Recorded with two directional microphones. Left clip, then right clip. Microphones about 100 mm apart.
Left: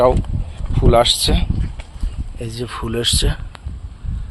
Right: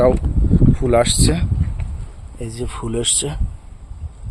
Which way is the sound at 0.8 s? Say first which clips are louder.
Left 4 dB; 15° right (ahead or behind).